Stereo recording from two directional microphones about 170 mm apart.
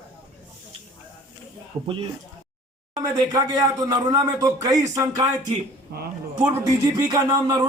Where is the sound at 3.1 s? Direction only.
20° right (ahead or behind).